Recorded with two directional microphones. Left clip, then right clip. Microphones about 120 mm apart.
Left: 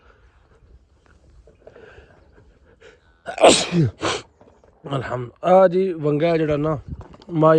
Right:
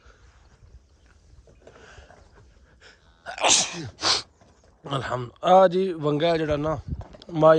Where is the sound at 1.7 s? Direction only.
5° right (ahead or behind).